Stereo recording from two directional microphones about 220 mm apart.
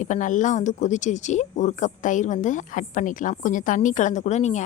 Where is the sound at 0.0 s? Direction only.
35° left (ahead or behind).